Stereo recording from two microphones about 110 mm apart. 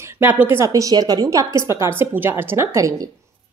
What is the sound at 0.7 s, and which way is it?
A woman's voice, 30° right (ahead or behind).